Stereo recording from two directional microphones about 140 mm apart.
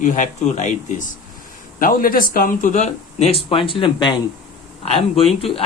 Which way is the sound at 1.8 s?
90° left.